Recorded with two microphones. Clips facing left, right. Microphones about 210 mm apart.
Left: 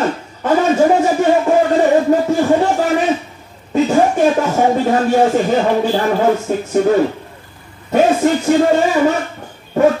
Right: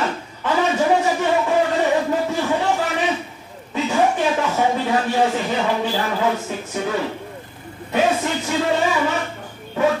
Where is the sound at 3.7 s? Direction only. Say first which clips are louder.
Left 6 dB; 45° left (ahead or behind).